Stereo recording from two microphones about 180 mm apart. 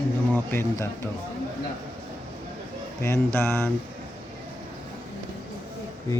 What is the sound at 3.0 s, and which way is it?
Speech, 15° left (ahead or behind).